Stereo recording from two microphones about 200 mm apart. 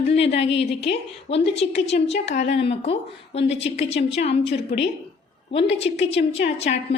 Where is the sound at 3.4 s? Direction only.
65° left (ahead or behind).